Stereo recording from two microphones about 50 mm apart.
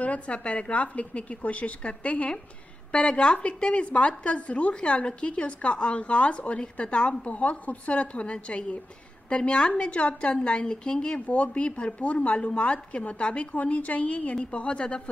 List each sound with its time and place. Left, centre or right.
0.0 s a woman's voice: left